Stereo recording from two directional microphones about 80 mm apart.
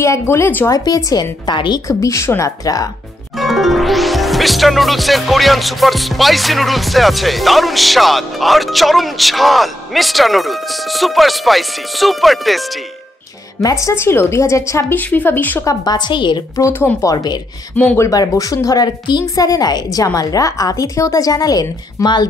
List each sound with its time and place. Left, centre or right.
0.3 s speech: left
0.7 s speech: left
1.9 s a woman's voice: left
3.3 s music: centre
13.6 s a woman's voice: left
15.0 s speech: left
15.6 s a woman's voice: left
17.0 s speech: left
17.9 s a woman's voice: left
18.9 s a woman's voice: left
19.2 s a woman's voice: left